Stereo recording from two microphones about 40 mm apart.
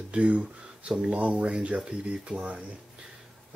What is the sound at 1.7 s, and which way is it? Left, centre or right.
Speech, right.